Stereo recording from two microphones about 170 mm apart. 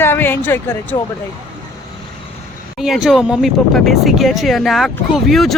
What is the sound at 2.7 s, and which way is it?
Speech, centre (ahead or behind).